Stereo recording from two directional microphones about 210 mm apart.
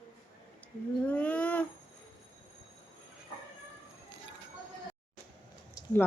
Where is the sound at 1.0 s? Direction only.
5° left (ahead or behind).